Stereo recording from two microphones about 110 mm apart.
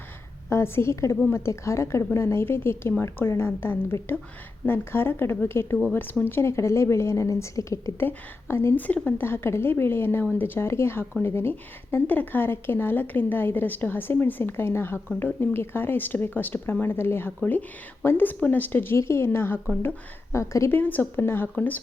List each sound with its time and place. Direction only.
0.5 s a woman's voice: 25° left (ahead or behind)